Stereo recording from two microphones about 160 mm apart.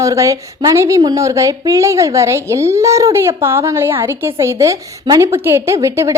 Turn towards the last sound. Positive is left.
turn(degrees=-15)  # may be behind; listen again after turning